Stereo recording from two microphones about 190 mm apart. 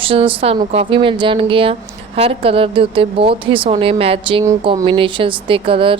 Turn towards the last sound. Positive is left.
turn(degrees=-30)  # may be behind; listen again after turning